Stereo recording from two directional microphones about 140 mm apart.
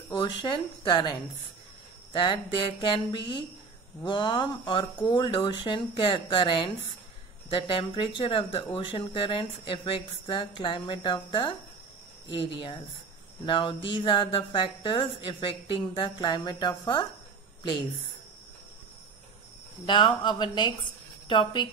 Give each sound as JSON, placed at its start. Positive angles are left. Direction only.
{"t": 0.1, "sound": "speech", "side_deg": 35}
{"t": 2.1, "sound": "speech", "side_deg": 35}
{"t": 19.9, "sound": "speech", "side_deg": 35}